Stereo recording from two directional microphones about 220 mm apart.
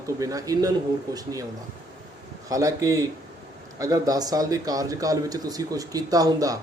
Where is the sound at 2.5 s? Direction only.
15° right (ahead or behind).